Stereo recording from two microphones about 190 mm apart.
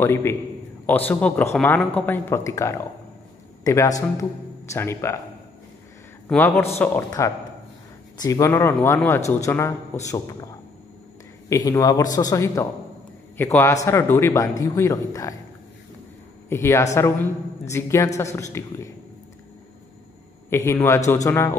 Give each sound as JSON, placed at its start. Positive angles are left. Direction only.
{"t": 0.0, "sound": "a man's voice", "side_deg": 15}
{"t": 6.2, "sound": "a man's voice", "side_deg": 10}
{"t": 11.4, "sound": "a man's voice", "side_deg": 15}
{"t": 16.4, "sound": "a man's voice", "side_deg": 15}
{"t": 20.4, "sound": "a man's voice", "side_deg": 15}